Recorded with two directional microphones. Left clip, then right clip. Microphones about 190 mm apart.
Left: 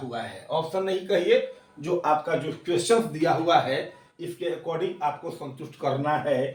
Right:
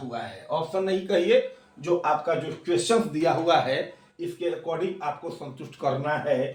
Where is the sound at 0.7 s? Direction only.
20° right (ahead or behind).